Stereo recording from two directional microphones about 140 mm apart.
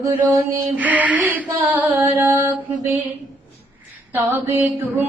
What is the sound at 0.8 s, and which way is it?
Mantra, 10° right (ahead or behind).